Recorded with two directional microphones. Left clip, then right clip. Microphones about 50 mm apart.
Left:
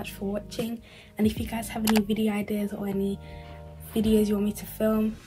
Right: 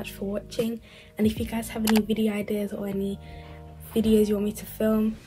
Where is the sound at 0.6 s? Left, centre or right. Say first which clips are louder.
Right 7 dB; centre.